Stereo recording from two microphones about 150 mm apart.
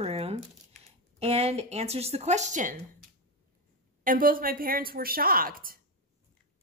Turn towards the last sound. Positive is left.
turn(degrees=-75)  # may be behind; listen again after turning